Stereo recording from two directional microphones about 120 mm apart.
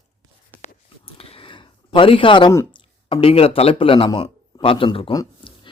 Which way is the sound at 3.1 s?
50° left (ahead or behind).